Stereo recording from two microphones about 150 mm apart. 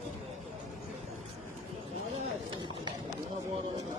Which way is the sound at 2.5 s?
30° right (ahead or behind).